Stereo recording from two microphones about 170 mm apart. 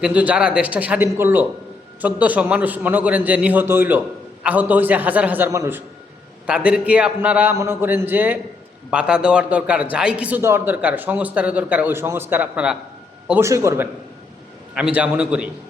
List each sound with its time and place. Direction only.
0.0 s a man's voice: 10° right (ahead or behind)
14.8 s a man's voice: 5° right (ahead or behind)